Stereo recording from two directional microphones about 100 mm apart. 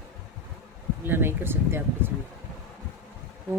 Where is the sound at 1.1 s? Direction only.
20° right (ahead or behind).